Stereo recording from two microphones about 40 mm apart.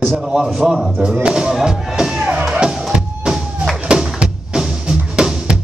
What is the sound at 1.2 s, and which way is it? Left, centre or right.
Music, centre.